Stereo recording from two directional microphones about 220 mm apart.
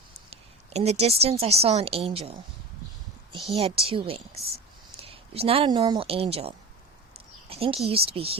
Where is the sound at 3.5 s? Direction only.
25° right (ahead or behind).